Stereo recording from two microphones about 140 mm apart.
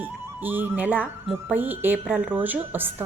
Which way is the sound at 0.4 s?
15° right (ahead or behind).